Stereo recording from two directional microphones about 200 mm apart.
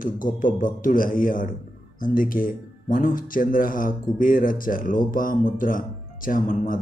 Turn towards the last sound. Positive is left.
turn(degrees=40)  # may be behind; listen again after turning